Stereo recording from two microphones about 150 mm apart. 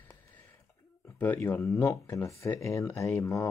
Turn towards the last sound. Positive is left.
turn(degrees=20)  # may be behind; listen again after turning